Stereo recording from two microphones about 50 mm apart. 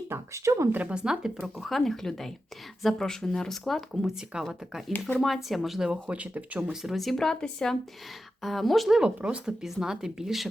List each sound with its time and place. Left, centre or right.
0.1 s a sound: right
0.9 s speech: centre
1.5 s speech: centre
4.3 s speech: centre
4.9 s speech: left
5.2 s speech: centre
5.9 s speech: right
6.8 s speech: centre
8.9 s speech: centre